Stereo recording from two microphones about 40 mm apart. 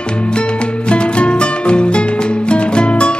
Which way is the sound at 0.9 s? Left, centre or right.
Left.